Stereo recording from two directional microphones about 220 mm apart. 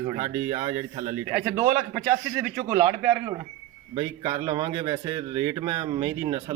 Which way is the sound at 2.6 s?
20° right (ahead or behind).